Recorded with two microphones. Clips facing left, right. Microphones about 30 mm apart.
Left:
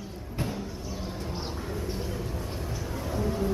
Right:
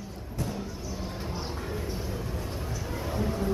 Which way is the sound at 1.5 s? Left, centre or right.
Centre.